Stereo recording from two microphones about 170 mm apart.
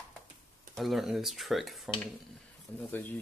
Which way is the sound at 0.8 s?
Centre (ahead or behind).